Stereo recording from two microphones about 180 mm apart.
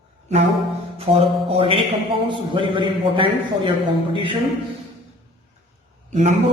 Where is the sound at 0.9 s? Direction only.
30° right (ahead or behind).